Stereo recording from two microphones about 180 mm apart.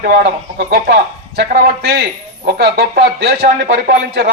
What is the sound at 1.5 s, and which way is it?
A man's voice, 55° right (ahead or behind).